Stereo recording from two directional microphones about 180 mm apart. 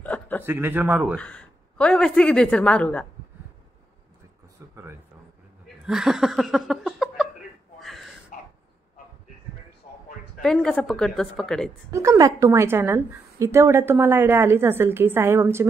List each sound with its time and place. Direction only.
0.0 s chuckle: 10° left (ahead or behind)
0.4 s a woman's voice: 10° right (ahead or behind)
1.1 s a woman's voice: 5° left (ahead or behind)
5.9 s laughter: centre (ahead or behind)
7.8 s gasp: centre (ahead or behind)
8.3 s a sound: 50° left (ahead or behind)
10.4 s a woman's voice: 5° left (ahead or behind)
11.9 s a woman's voice: 15° right (ahead or behind)